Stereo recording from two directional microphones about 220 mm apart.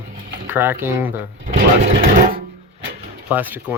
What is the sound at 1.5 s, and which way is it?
Sewing machine, 40° right (ahead or behind).